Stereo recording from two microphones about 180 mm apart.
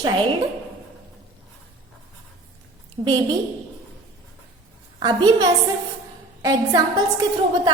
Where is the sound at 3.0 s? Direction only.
30° right (ahead or behind).